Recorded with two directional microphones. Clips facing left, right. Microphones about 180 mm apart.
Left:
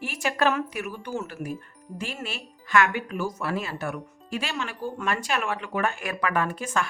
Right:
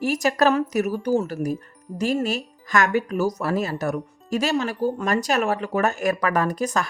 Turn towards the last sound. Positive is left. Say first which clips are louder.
# right 4 dB
turn(degrees=-40)  # may be behind; listen again after turning